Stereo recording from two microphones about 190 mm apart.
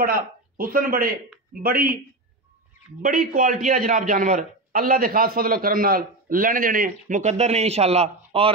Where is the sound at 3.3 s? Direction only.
45° right (ahead or behind).